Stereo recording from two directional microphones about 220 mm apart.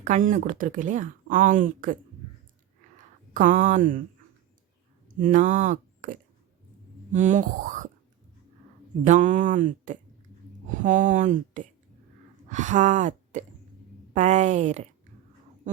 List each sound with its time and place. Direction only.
0.0 s speech: 35° right (ahead or behind)
3.3 s speech: 35° right (ahead or behind)
5.2 s speech: 35° right (ahead or behind)
9.0 s speech: 35° right (ahead or behind)